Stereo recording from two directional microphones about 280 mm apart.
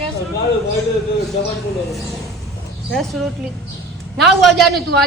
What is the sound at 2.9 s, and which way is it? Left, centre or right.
A man's voice, centre.